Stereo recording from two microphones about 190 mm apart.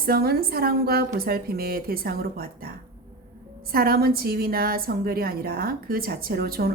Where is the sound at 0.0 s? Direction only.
55° right (ahead or behind).